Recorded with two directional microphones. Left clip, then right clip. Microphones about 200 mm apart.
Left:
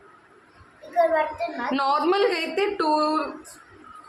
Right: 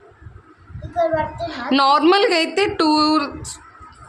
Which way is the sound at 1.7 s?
55° right (ahead or behind).